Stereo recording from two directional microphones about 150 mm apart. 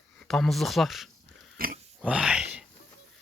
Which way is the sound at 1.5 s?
75° right (ahead or behind).